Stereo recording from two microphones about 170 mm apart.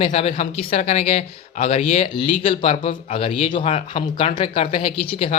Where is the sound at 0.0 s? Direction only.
35° left (ahead or behind).